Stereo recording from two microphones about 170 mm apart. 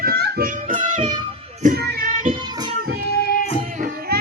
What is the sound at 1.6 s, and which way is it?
Child singing, 70° right (ahead or behind).